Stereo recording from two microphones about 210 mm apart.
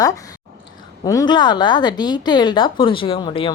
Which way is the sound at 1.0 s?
20° left (ahead or behind).